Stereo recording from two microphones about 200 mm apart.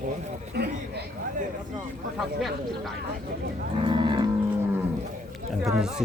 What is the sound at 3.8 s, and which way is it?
Cattle, 25° right (ahead or behind).